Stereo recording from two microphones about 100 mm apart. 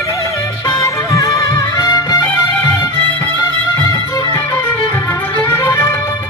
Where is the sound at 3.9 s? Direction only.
30° left (ahead or behind).